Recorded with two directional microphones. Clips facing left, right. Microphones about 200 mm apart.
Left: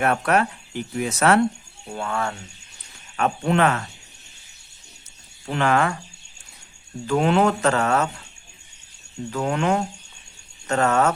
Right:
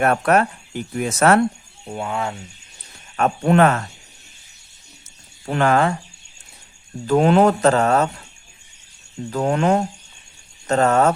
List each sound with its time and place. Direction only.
0.0 s speech: 45° right (ahead or behind)
1.9 s speech: 15° right (ahead or behind)
3.2 s speech: 50° right (ahead or behind)
5.5 s speech: 45° right (ahead or behind)
7.1 s speech: 40° right (ahead or behind)
9.3 s speech: 35° right (ahead or behind)